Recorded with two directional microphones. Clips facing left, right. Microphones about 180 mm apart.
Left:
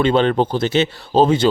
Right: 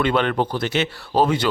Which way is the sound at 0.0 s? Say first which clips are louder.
Left 5 dB; 30° left (ahead or behind).